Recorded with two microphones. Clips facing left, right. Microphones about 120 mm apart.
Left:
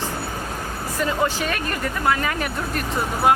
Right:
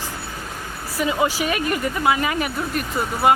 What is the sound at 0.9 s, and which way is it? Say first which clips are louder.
Speech: right 2 dB; 10° right (ahead or behind).